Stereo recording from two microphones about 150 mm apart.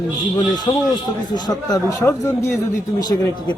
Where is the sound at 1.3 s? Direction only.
25° left (ahead or behind).